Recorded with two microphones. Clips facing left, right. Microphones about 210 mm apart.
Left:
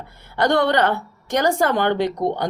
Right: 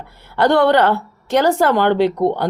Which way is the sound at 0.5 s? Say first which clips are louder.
Right 5 dB; 60° right (ahead or behind).